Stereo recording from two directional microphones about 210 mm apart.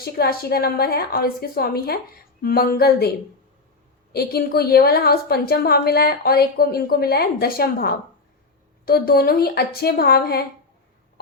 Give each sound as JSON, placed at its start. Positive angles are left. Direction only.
{"t": 0.0, "sound": "a woman's voice", "side_deg": 50}
{"t": 4.1, "sound": "a woman's voice", "side_deg": 50}